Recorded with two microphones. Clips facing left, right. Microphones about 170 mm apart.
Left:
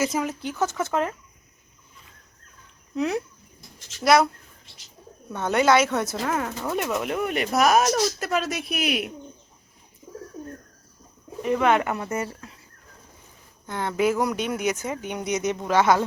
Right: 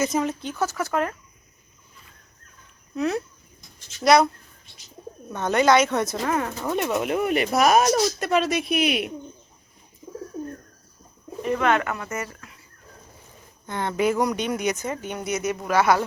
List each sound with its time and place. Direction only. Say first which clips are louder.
0.0 s speech: right 1 dB; 10° left (ahead or behind)
0.6 s speech: left 1 dB; 20° left (ahead or behind)
2.9 s speech: even; 15° left (ahead or behind)
4.0 s speech: right 1 dB; 5° left (ahead or behind)
5.3 s speech: right 1 dB; 5° left (ahead or behind)
11.4 s speech: left 1 dB; 10° left (ahead or behind)
12.0 s speech: left 3 dB; 30° left (ahead or behind)
13.7 s speech: even; 5° left (ahead or behind)